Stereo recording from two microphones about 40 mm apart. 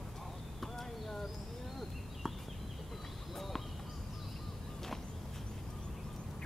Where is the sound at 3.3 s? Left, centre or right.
Centre.